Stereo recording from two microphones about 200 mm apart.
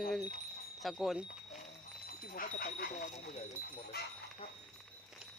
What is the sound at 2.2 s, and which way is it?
Speech, 45° left (ahead or behind).